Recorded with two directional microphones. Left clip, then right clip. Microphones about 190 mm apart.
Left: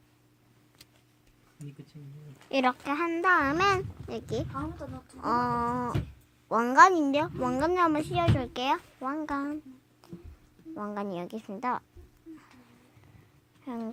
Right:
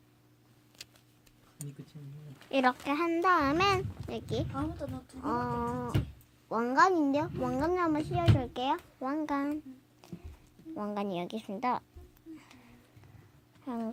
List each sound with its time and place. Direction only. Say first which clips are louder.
2.5 s speech: left 1 dB; 10° left (ahead or behind)
5.2 s a child's voice: left 6 dB; 30° left (ahead or behind)
9.0 s speech: left 1 dB; centre (ahead or behind)
10.8 s speech: even; centre (ahead or behind)
13.7 s speech: even; centre (ahead or behind)